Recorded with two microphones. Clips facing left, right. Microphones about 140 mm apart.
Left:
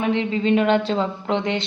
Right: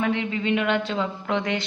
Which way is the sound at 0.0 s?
25° left (ahead or behind).